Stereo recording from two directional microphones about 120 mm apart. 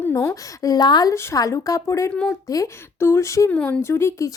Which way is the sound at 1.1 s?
25° left (ahead or behind).